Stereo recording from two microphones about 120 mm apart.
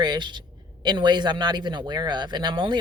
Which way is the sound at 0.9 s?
40° right (ahead or behind).